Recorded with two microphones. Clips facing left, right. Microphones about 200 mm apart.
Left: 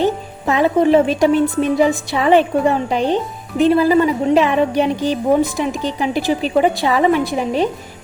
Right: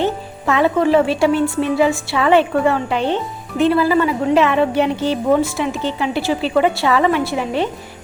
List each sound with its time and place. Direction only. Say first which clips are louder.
0.0 s a woman's voice: left 2 dB; 15° left (ahead or behind)